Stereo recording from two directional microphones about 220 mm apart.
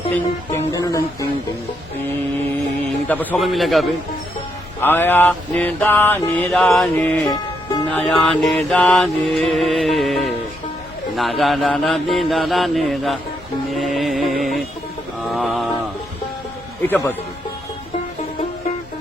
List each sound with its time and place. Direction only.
0.7 s mantra: 15° left (ahead or behind)
3.1 s mantra: 5° left (ahead or behind)
7.3 s music: 20° left (ahead or behind)
7.9 s mantra: 5° left (ahead or behind)
13.7 s music: centre (ahead or behind)
15.2 s a sound: centre (ahead or behind)
16.8 s mantra: 10° left (ahead or behind)